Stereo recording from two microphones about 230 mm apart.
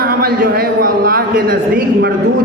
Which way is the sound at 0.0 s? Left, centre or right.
Right.